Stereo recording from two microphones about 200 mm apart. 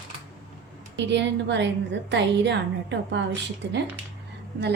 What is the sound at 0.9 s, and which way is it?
A woman's voice, 60° right (ahead or behind).